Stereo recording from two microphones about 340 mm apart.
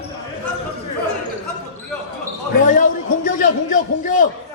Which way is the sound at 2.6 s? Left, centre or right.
Left.